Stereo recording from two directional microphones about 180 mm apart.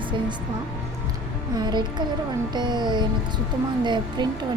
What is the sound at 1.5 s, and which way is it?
Speech, 25° right (ahead or behind).